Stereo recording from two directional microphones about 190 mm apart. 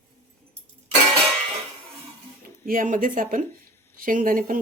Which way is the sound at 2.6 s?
45° right (ahead or behind).